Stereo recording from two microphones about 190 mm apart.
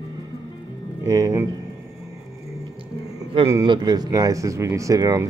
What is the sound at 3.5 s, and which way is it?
Speech, 25° right (ahead or behind).